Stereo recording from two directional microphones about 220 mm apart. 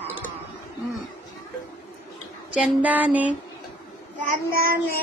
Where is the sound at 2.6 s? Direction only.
5° right (ahead or behind).